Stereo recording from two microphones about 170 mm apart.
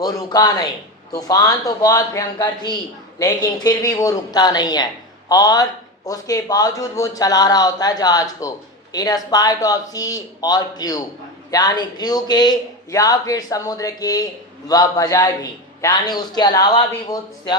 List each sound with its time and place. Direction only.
0.0 s speech: 20° left (ahead or behind)